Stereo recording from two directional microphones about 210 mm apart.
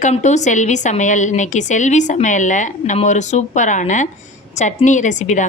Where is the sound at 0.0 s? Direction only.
35° left (ahead or behind).